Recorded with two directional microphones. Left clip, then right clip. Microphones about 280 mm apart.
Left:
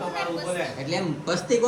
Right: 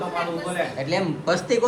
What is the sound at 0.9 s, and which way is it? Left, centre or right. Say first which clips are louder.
Speech: right 4 dB; centre.